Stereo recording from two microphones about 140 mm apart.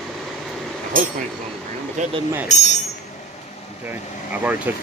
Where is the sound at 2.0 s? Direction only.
60° right (ahead or behind).